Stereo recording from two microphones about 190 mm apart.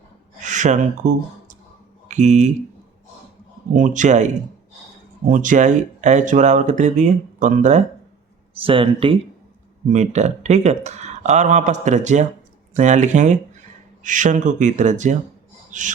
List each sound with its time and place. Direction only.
0.4 s speech: 40° right (ahead or behind)
3.8 s speech: 40° right (ahead or behind)
5.3 s speech: 40° right (ahead or behind)
8.6 s speech: 25° right (ahead or behind)